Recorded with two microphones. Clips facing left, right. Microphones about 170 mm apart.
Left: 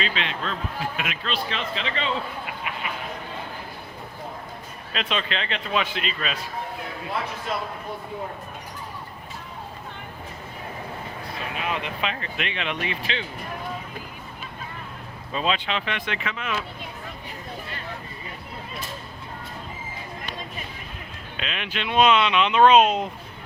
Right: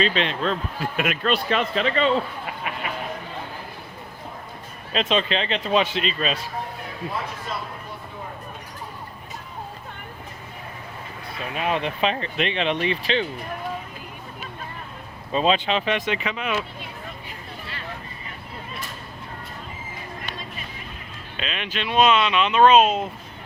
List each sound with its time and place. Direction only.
0.0 s a man's voice: 40° right (ahead or behind)
4.9 s speech: 25° right (ahead or behind)
11.7 s speech: 30° right (ahead or behind)
15.3 s speech: 25° right (ahead or behind)
21.3 s speech: 10° left (ahead or behind)